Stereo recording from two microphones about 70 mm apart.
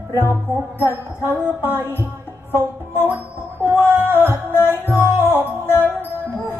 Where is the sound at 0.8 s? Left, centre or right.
Right.